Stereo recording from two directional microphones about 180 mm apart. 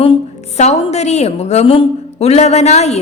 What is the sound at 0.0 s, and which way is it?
A woman's voice, 35° left (ahead or behind).